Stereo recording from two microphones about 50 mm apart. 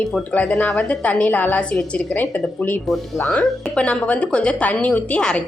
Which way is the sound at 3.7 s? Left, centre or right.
Left.